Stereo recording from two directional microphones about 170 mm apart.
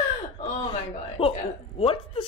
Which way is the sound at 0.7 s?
30° left (ahead or behind).